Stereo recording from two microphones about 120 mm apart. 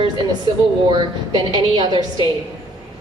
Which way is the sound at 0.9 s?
40° right (ahead or behind).